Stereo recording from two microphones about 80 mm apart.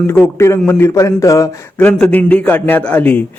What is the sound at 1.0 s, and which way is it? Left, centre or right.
Speech, left.